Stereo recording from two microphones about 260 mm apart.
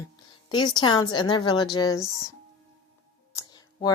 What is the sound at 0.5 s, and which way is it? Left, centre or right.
A woman's voice, centre.